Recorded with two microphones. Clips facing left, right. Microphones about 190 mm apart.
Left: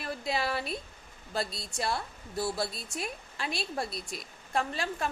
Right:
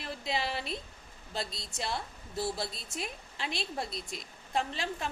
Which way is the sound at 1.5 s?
20° right (ahead or behind).